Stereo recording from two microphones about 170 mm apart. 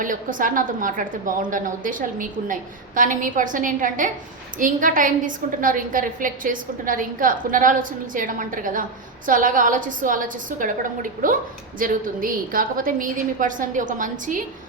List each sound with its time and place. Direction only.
0.0 s a woman's voice: 50° right (ahead or behind)